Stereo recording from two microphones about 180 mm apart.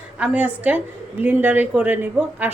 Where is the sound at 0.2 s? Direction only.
10° right (ahead or behind).